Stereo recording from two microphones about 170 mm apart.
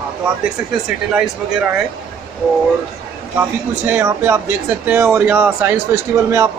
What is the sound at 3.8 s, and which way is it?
Speech, 10° right (ahead or behind).